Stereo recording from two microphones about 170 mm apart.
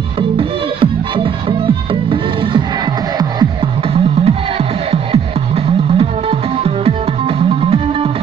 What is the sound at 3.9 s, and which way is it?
Music, 35° right (ahead or behind).